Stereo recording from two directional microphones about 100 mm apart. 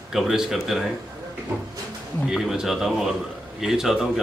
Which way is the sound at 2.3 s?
5° right (ahead or behind).